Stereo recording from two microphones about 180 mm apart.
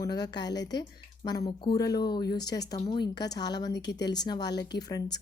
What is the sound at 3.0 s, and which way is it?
Speech, 70° left (ahead or behind).